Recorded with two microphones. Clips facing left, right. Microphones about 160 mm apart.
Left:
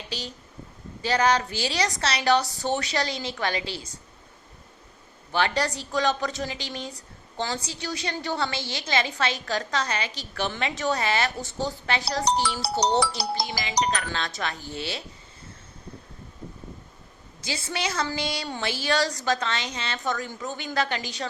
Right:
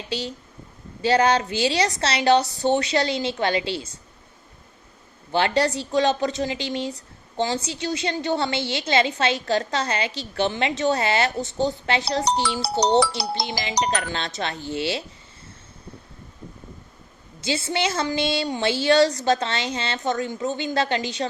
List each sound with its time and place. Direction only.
1.0 s a woman's voice: 30° right (ahead or behind)
5.3 s a woman's voice: 30° right (ahead or behind)
13.1 s speech: 90° right
13.5 s a woman's voice: 30° right (ahead or behind)
17.4 s a woman's voice: 25° right (ahead or behind)